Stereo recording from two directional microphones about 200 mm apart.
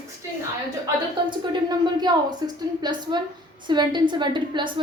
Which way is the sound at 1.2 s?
20° right (ahead or behind).